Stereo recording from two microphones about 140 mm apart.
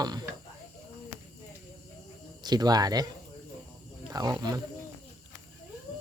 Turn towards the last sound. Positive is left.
turn(degrees=-30)  # may be behind; listen again after turning